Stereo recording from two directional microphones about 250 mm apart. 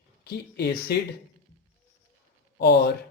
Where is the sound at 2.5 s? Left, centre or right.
Left.